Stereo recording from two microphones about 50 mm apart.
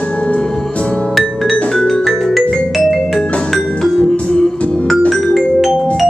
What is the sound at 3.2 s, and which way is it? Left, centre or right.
Music, left.